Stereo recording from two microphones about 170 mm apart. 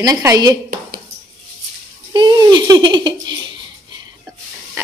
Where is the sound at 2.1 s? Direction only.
25° right (ahead or behind).